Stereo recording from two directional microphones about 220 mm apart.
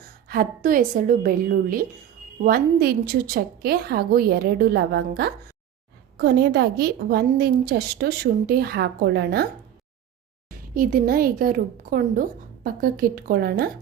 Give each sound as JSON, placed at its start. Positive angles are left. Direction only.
{"t": 0.3, "sound": "a woman's voice", "side_deg": -40}
{"t": 10.8, "sound": "a woman's voice", "side_deg": -40}